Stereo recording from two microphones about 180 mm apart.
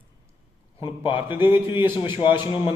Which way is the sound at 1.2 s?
10° right (ahead or behind).